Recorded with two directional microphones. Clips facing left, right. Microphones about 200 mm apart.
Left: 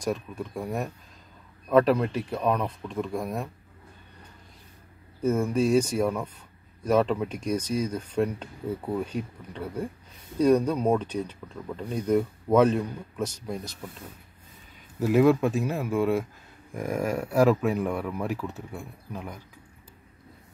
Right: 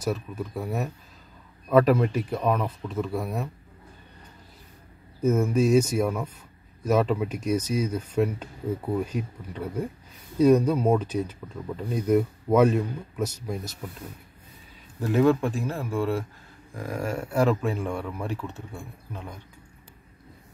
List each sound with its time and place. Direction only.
0.0 s speech: 5° right (ahead or behind)
5.2 s speech: 5° right (ahead or behind)
15.0 s speech: 10° left (ahead or behind)
17.3 s speech: 5° left (ahead or behind)